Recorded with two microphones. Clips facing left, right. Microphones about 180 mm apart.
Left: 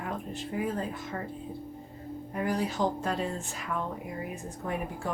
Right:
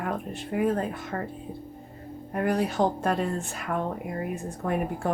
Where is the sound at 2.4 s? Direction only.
60° right (ahead or behind).